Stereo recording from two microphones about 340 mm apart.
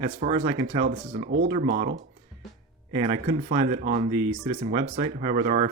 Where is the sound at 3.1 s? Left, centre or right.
Centre.